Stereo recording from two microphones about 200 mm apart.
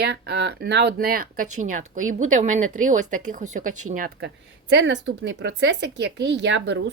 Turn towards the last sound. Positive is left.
turn(degrees=-60)  # may be behind; listen again after turning